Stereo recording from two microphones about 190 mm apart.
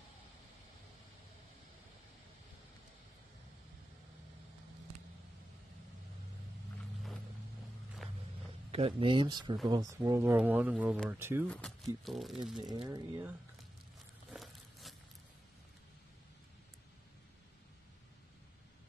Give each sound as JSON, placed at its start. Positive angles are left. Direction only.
{"t": 8.7, "sound": "speech", "side_deg": -30}
{"t": 11.4, "sound": "speech", "side_deg": 5}
{"t": 12.6, "sound": "speech", "side_deg": -20}
{"t": 14.3, "sound": "a sound", "side_deg": 0}